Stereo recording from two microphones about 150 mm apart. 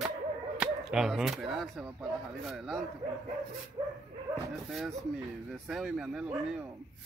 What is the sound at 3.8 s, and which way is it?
Dog, 30° right (ahead or behind).